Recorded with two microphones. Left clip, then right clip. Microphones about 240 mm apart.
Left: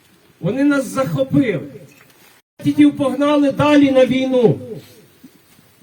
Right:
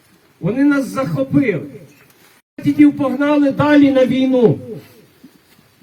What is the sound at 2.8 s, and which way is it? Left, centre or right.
A man's voice, centre.